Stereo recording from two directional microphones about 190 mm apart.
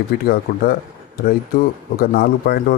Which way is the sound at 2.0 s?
50° left (ahead or behind).